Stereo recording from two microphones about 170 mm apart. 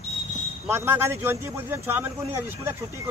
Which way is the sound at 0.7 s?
15° right (ahead or behind).